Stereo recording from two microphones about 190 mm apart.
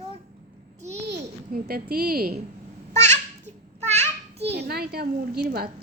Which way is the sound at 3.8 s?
35° right (ahead or behind).